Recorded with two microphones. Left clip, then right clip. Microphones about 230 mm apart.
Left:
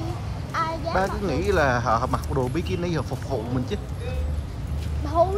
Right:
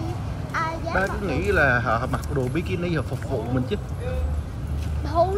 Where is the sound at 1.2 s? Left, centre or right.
Centre.